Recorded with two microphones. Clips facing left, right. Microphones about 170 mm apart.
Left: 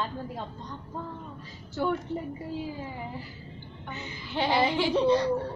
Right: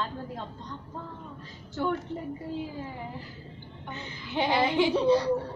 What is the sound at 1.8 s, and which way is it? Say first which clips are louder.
Speech: left 1 dB; 10° left (ahead or behind).